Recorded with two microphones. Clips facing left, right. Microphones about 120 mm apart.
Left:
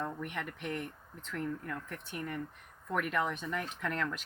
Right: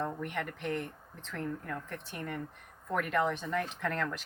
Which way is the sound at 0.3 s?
45° right (ahead or behind).